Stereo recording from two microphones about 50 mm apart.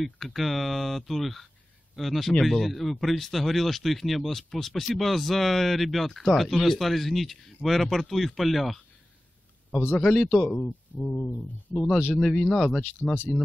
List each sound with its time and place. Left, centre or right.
0.0 s speech: centre
9.9 s speech: centre
10.2 s speech: centre
12.2 s speech: centre